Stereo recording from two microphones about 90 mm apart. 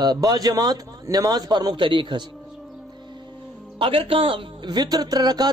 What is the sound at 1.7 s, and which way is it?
Speech, 70° right (ahead or behind).